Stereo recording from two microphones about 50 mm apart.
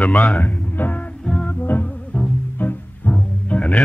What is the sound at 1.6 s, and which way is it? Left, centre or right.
Music, left.